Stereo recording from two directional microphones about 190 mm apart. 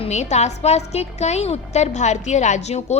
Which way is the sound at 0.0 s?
35° left (ahead or behind).